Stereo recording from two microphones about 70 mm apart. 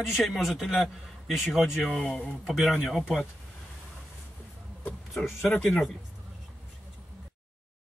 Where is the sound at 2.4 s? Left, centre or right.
Centre.